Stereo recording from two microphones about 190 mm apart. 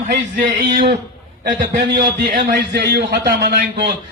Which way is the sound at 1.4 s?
55° right (ahead or behind).